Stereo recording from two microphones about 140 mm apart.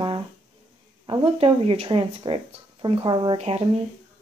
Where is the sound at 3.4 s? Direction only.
45° right (ahead or behind).